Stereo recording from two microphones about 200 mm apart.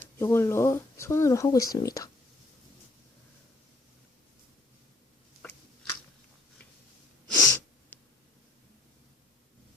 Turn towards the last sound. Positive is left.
turn(degrees=10)  # may be behind; listen again after turning